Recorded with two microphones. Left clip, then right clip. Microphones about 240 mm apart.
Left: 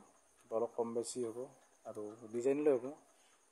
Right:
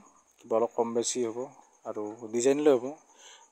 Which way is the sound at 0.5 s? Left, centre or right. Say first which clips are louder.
Right 10 dB; right.